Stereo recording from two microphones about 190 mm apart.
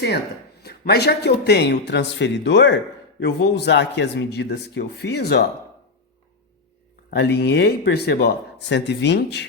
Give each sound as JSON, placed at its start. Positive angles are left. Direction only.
{"t": 0.6, "sound": "speech", "side_deg": 60}
{"t": 7.1, "sound": "speech", "side_deg": 60}